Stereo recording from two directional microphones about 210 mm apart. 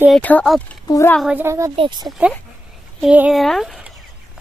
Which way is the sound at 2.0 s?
5° right (ahead or behind).